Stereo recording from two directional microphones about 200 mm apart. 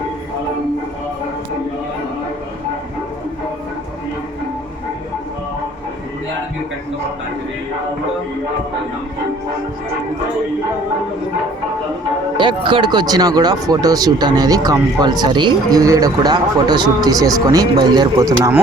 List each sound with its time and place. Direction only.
12.4 s speech: 25° right (ahead or behind)